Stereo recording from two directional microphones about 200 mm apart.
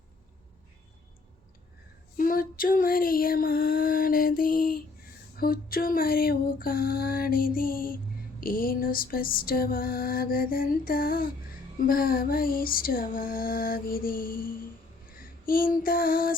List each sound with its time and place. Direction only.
2.1 s music: 45° left (ahead or behind)
15.1 s female singing: 45° left (ahead or behind)